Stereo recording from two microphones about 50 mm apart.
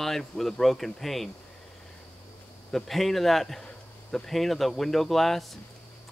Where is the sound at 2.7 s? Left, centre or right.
Centre.